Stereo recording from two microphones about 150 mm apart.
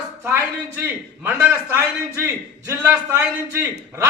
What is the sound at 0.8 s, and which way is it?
A man's voice, 15° right (ahead or behind).